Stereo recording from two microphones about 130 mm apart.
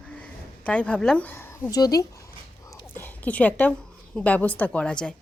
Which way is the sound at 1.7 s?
30° left (ahead or behind).